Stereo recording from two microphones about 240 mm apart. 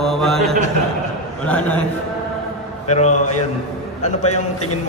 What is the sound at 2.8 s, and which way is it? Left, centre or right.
Speech, left.